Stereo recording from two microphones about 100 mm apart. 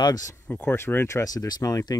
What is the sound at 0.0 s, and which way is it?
Speech, 35° left (ahead or behind).